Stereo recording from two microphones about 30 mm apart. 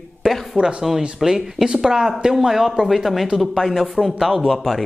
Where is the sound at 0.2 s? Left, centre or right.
Right.